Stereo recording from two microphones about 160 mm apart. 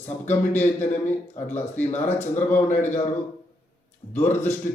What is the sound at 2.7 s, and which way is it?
Speech, 50° left (ahead or behind).